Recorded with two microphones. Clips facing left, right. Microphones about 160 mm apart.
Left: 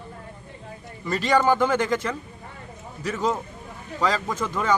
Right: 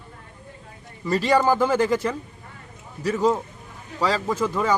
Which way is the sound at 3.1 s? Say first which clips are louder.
Right 4 dB; 15° right (ahead or behind).